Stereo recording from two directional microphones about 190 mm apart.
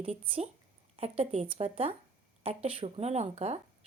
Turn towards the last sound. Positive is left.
turn(degrees=-35)  # may be behind; listen again after turning